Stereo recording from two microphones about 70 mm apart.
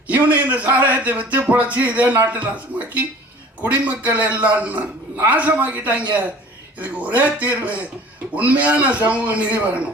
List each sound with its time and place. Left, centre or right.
0.1 s a man's voice: right